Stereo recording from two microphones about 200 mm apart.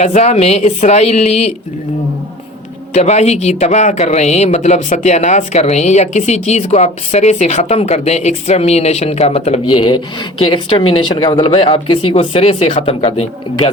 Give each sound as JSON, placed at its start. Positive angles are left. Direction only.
{"t": 0.0, "sound": "speech", "side_deg": 35}
{"t": 2.9, "sound": "speech", "side_deg": 35}
{"t": 9.7, "sound": "speech", "side_deg": 20}